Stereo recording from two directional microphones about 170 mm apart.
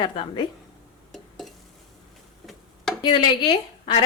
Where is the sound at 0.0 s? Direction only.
30° left (ahead or behind).